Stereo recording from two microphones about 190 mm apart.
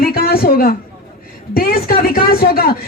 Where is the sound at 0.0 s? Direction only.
50° left (ahead or behind).